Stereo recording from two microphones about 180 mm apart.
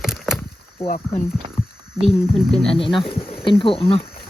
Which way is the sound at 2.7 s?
30° left (ahead or behind).